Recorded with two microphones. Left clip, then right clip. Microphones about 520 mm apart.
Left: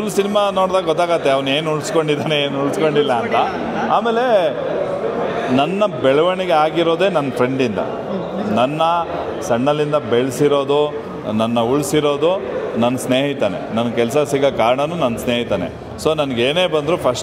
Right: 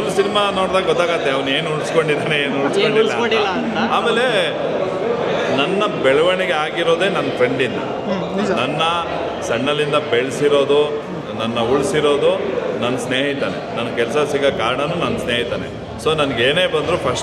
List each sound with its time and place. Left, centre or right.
0.2 s a man's voice: left
3.9 s a man's voice: left
5.6 s a man's voice: left
8.5 s a man's voice: left
16.1 s a man's voice: left